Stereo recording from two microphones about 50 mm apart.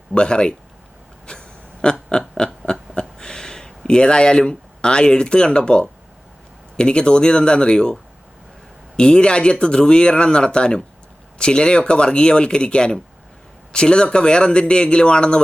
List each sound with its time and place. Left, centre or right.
0.1 s speech: centre
1.3 s a sound: centre
6.7 s speech: centre
9.0 s speech: centre